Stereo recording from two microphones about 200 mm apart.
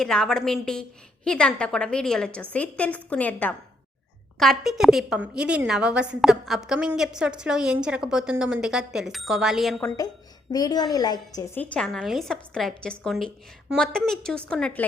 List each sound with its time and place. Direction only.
0.0 s a woman's voice: 5° left (ahead or behind)
10.5 s a woman's voice: 20° left (ahead or behind)
11.6 s a woman's voice: 5° left (ahead or behind)